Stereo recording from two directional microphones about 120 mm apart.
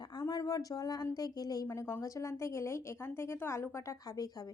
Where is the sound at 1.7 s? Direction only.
20° left (ahead or behind).